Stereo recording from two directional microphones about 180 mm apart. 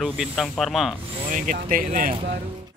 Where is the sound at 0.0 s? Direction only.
Centre (ahead or behind).